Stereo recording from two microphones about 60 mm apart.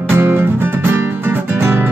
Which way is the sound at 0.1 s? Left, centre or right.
Right.